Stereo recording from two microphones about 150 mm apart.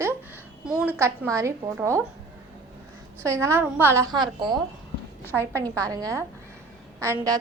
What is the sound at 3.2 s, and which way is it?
Speech, 20° right (ahead or behind).